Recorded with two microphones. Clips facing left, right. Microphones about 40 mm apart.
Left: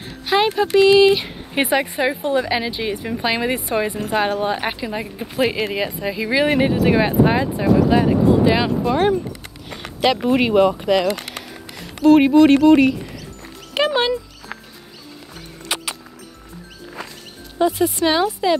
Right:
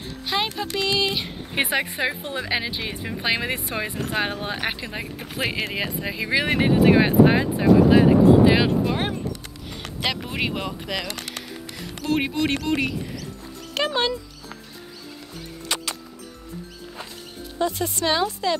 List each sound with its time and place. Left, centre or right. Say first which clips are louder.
0.3 s a sound: left 8 dB; centre
0.7 s speech: left 12 dB; centre
13.7 s dog: left 5 dB; left
15.7 s music: left 3 dB; centre
17.6 s speech: left 7 dB; centre